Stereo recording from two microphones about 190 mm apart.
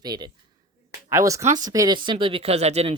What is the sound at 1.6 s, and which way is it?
Speech, 20° right (ahead or behind).